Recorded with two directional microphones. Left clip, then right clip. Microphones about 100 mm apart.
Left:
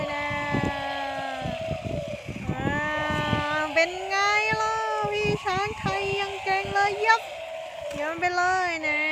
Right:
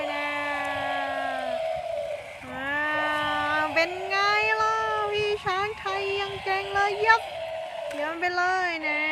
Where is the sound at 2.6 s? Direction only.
5° left (ahead or behind).